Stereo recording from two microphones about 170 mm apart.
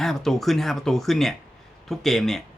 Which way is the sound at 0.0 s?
Centre (ahead or behind).